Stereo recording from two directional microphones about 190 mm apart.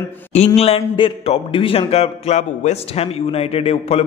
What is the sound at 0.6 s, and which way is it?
A man's voice, 30° left (ahead or behind).